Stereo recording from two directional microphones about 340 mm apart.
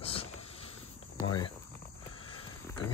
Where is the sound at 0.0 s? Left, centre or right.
Centre.